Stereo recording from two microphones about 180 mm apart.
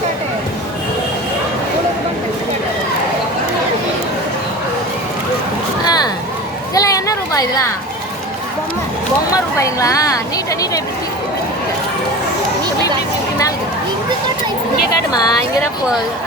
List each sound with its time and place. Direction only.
5.8 s a sound: 20° left (ahead or behind)
9.3 s a woman's voice: 20° left (ahead or behind)
15.1 s a woman's voice: 20° left (ahead or behind)